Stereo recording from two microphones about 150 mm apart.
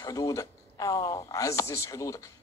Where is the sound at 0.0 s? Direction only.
20° left (ahead or behind).